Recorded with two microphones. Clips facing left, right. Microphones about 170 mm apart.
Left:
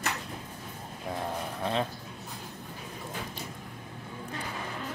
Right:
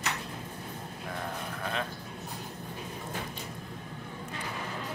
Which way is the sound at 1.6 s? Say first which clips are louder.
Left 5 dB; 30° left (ahead or behind).